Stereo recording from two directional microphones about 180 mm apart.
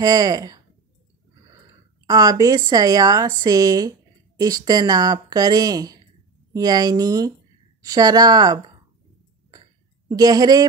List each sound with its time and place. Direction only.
0.0 s a woman's voice: 20° right (ahead or behind)
2.0 s a woman's voice: 20° right (ahead or behind)
10.0 s a woman's voice: 20° right (ahead or behind)